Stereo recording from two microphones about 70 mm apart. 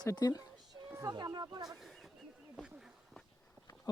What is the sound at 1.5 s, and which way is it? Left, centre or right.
Speech, right.